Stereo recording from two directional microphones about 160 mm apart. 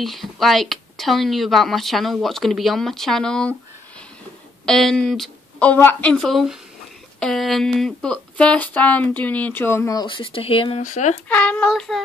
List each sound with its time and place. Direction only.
0.0 s speech: centre (ahead or behind)
4.6 s a woman's voice: 5° left (ahead or behind)
6.1 s speech: centre (ahead or behind); by 10.0 s 20° left (ahead or behind)
10.0 s speech: 30° left (ahead or behind)
10.8 s speech: 50° left (ahead or behind)
11.2 s speech: 10° left (ahead or behind)